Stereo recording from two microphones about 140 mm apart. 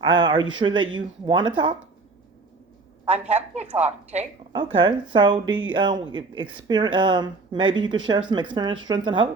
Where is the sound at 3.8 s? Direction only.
50° right (ahead or behind).